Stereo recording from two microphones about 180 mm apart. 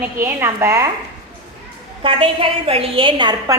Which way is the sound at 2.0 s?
30° right (ahead or behind).